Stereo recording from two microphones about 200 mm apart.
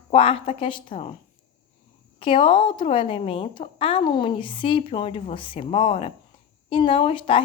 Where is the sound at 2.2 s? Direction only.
25° left (ahead or behind).